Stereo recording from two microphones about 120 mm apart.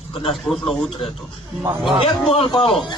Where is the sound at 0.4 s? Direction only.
5° left (ahead or behind).